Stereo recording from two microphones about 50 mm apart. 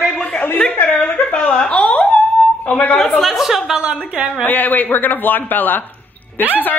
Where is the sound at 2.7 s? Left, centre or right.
Left.